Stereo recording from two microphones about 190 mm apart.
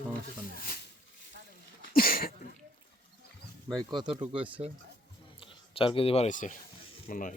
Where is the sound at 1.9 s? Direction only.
50° left (ahead or behind).